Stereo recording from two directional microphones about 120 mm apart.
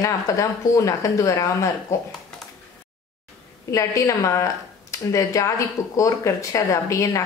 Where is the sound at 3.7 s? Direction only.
25° left (ahead or behind).